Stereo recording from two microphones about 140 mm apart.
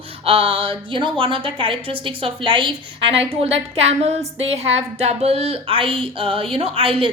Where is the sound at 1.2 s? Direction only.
40° right (ahead or behind).